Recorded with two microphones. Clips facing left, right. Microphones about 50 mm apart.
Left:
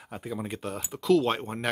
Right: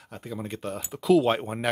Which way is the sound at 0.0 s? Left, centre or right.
Centre.